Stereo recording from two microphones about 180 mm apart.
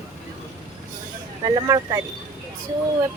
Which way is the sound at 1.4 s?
20° right (ahead or behind).